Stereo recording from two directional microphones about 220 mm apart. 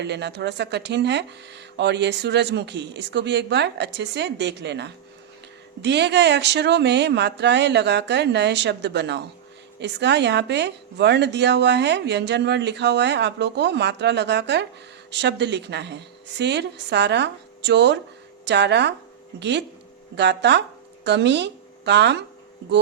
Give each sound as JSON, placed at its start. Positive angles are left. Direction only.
{"t": 0.0, "sound": "a woman's voice", "side_deg": -50}